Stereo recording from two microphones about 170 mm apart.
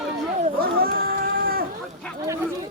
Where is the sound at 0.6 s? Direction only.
60° right (ahead or behind).